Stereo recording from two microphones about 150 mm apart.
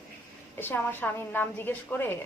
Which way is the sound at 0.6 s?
15° left (ahead or behind).